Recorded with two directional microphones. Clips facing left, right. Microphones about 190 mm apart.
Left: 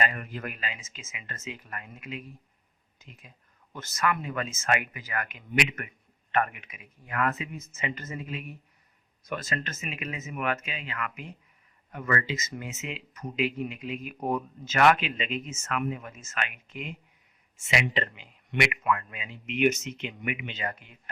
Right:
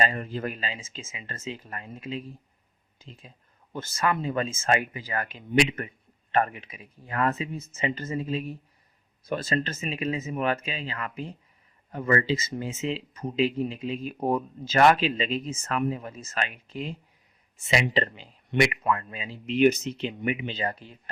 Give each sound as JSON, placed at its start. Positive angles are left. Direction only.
{"t": 0.0, "sound": "speech", "side_deg": -30}